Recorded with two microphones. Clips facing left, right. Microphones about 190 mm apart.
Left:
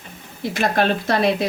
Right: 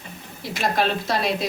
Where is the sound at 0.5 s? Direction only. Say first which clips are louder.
Left 3 dB; 55° left (ahead or behind).